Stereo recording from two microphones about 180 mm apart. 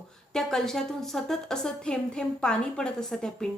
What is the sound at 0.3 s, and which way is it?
A woman's voice, centre (ahead or behind).